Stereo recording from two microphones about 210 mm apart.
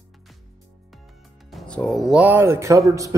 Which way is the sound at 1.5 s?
Centre (ahead or behind).